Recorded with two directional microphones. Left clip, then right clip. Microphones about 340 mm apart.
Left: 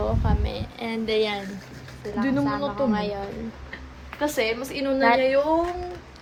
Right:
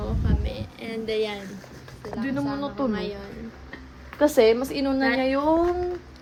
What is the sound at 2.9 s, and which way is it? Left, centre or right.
Speech, centre.